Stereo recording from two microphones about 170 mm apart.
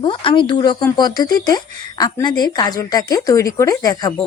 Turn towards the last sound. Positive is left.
turn(degrees=20)  # may be behind; listen again after turning